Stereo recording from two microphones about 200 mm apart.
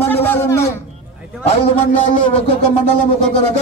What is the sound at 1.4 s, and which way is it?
A man's voice, 30° left (ahead or behind).